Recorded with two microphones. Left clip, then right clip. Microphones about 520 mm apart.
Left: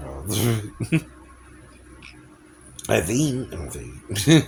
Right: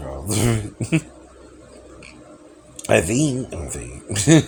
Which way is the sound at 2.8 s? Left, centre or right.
Left.